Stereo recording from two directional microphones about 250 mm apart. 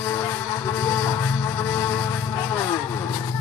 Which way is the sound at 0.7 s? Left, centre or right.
Centre.